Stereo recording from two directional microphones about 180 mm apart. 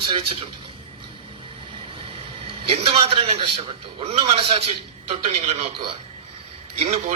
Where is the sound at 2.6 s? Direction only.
35° right (ahead or behind).